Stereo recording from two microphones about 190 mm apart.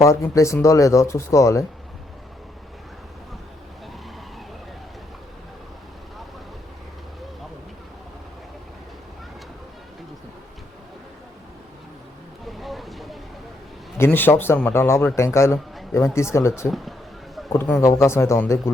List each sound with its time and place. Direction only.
0.0 s speech: 15° left (ahead or behind)
12.5 s vehicle: centre (ahead or behind)
14.0 s speech: 10° left (ahead or behind)
17.5 s speech: 15° left (ahead or behind)